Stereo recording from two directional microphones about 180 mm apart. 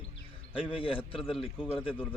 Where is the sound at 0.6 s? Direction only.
30° left (ahead or behind).